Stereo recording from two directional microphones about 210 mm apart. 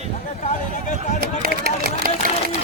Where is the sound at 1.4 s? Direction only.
45° right (ahead or behind).